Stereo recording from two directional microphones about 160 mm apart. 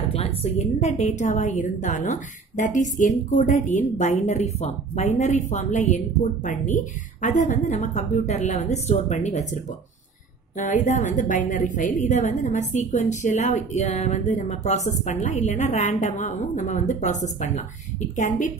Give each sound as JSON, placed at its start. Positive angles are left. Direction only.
{"t": 0.1, "sound": "a woman's voice", "side_deg": 40}
{"t": 10.6, "sound": "a woman's voice", "side_deg": 55}